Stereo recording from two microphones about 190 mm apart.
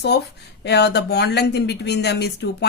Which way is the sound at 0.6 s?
60° left (ahead or behind).